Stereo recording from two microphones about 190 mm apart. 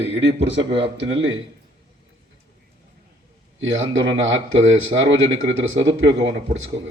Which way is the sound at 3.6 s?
80° right.